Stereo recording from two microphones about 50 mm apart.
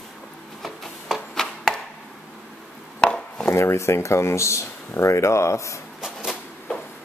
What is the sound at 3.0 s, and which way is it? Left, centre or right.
Chopping, left.